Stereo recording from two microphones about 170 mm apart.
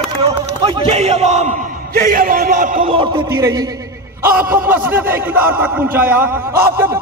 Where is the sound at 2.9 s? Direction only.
30° right (ahead or behind).